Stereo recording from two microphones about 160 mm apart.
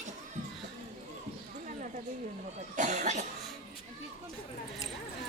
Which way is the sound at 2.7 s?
50° right (ahead or behind).